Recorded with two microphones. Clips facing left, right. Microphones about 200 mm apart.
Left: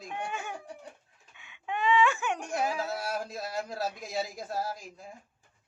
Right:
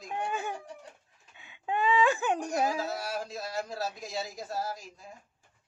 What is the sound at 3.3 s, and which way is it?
A man's voice, 55° left (ahead or behind).